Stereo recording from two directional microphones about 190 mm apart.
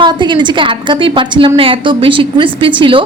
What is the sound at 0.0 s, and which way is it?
A woman's voice, 25° right (ahead or behind).